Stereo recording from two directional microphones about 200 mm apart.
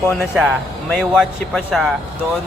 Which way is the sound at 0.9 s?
Centre (ahead or behind).